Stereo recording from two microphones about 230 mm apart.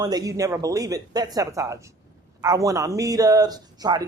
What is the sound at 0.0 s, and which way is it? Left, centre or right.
Speech, centre.